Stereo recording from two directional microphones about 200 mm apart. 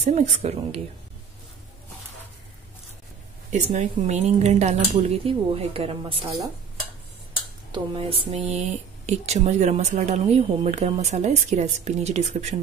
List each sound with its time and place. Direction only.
0.0 s speech: 35° right (ahead or behind)
3.4 s speech: 35° right (ahead or behind)
7.7 s speech: 25° right (ahead or behind)